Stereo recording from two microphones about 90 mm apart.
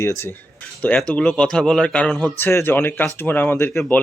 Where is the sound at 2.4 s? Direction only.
25° left (ahead or behind).